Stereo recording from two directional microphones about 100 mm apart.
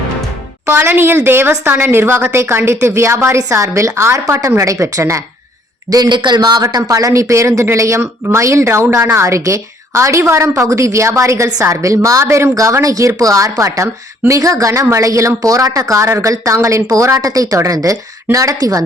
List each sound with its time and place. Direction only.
0.6 s a woman's voice: 20° right (ahead or behind)
5.9 s speech: 45° right (ahead or behind)